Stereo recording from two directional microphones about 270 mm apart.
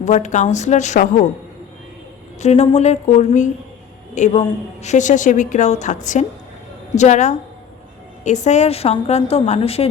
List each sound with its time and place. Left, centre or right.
0.0 s a woman's voice: left
2.4 s a woman's voice: left